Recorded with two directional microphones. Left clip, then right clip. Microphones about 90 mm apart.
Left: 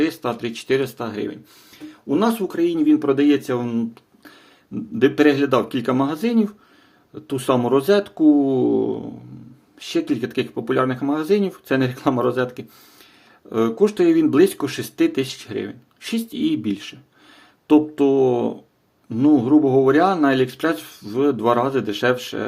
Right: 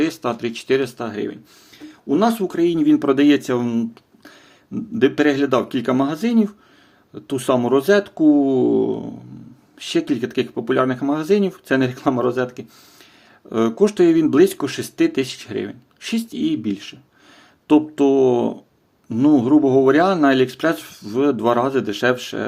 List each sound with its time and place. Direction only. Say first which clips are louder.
0.0 s speech: right 1 dB; 25° right (ahead or behind); by 1.4 s 10° right (ahead or behind)
2.0 s speech: right 2 dB; 25° right (ahead or behind); by 3.7 s 45° right (ahead or behind)
3.7 s speech: right 2 dB; 20° right (ahead or behind)
9.7 s speech: right 2 dB; 35° right (ahead or behind); by 11.9 s 20° right (ahead or behind)
11.9 s speech: even; centre (ahead or behind)
13.5 s speech: right 1 dB; 30° right (ahead or behind)
16.3 s speech: left 1 dB; centre (ahead or behind)
17.7 s speech: right 1 dB; 25° right (ahead or behind)